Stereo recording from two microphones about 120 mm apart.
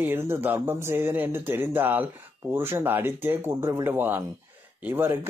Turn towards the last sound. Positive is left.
turn(degrees=-20)  # may be behind; listen again after turning